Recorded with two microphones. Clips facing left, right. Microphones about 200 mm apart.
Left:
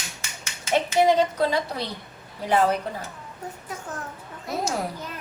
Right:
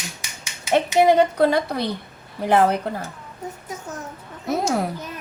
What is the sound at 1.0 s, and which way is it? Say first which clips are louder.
A woman's voice: right 4 dB; 60° right (ahead or behind).